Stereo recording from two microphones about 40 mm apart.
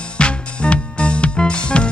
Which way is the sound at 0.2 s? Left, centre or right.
Left.